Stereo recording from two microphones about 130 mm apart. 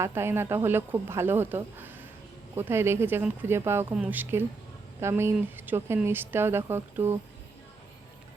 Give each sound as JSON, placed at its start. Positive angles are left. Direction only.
{"t": 0.0, "sound": "speech", "side_deg": -20}